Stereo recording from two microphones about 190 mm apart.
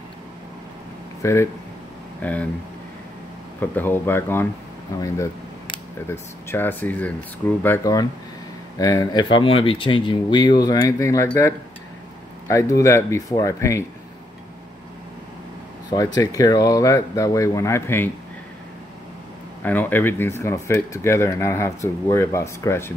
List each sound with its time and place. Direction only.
1.2 s speech: 15° left (ahead or behind)
3.5 s speech: 10° left (ahead or behind)
15.9 s speech: 20° left (ahead or behind)
19.6 s speech: 10° left (ahead or behind)